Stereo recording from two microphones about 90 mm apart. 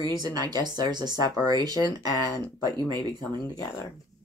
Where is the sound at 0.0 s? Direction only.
50° right (ahead or behind).